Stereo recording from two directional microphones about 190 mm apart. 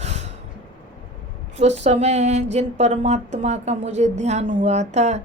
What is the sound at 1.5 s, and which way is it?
A woman's voice, 35° right (ahead or behind).